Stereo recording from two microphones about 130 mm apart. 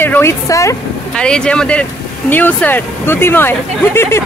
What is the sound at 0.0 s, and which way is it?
Speech, 20° left (ahead or behind).